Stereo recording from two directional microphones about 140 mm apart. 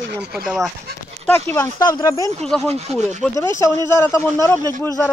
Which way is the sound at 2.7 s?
50° right (ahead or behind).